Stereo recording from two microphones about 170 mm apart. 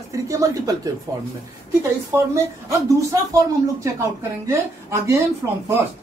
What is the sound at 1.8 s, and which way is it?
A woman's voice, 15° right (ahead or behind).